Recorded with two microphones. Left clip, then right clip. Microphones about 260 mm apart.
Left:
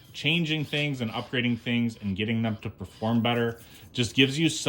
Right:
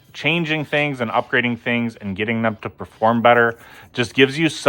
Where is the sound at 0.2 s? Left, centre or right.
Centre.